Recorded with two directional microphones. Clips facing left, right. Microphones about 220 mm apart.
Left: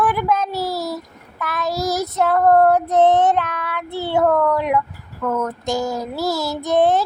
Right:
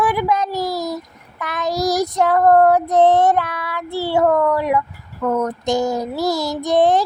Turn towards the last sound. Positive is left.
turn(degrees=-15)  # may be behind; listen again after turning